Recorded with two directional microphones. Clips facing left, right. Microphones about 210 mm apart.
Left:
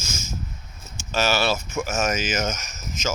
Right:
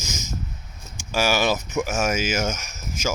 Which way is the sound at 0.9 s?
10° right (ahead or behind).